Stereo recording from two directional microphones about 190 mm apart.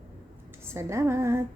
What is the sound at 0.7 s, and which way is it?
Speech, 15° right (ahead or behind).